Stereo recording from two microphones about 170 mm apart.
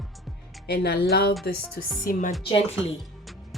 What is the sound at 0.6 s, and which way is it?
Speech, 70° left (ahead or behind).